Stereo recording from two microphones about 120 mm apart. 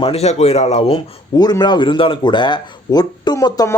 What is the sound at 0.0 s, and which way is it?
Speech, 60° left (ahead or behind).